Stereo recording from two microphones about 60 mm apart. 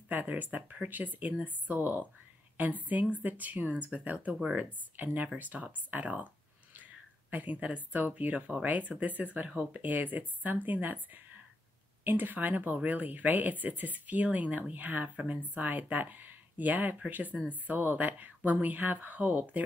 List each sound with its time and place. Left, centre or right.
0.1 s speech: right
12.0 s speech: right